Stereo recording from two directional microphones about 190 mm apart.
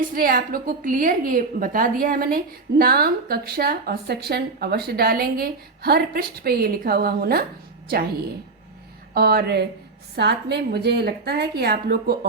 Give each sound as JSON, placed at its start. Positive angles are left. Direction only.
{"t": 0.1, "sound": "a woman's voice", "side_deg": -50}
{"t": 9.1, "sound": "a woman's voice", "side_deg": -55}